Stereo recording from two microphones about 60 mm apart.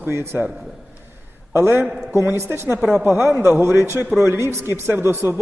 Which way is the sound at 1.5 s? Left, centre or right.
Right.